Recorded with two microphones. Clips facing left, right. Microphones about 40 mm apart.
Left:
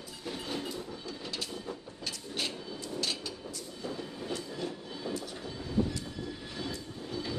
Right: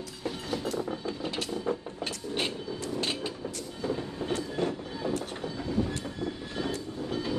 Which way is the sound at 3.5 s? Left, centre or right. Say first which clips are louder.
Right 6 dB; right.